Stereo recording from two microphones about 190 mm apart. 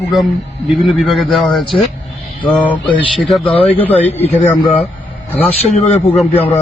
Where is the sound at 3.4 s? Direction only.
30° left (ahead or behind).